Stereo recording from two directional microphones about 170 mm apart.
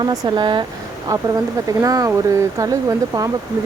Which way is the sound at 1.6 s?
20° right (ahead or behind).